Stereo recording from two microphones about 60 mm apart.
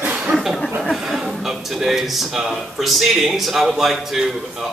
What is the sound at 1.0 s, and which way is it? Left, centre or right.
A man's voice, centre.